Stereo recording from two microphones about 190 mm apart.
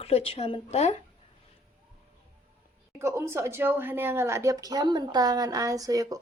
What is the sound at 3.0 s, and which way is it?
A woman's voice, 15° right (ahead or behind).